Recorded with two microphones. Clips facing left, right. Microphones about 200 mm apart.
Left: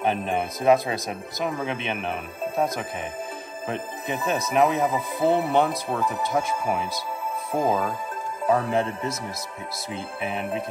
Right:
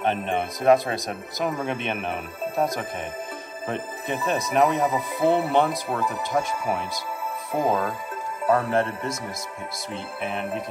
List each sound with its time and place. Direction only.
0.0 s speech: 5° left (ahead or behind)
10.2 s speech: centre (ahead or behind)